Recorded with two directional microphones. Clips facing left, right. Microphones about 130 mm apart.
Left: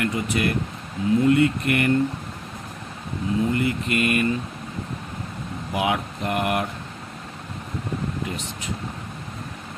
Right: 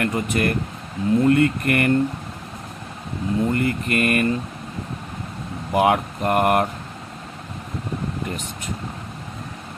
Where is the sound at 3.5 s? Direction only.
50° right (ahead or behind).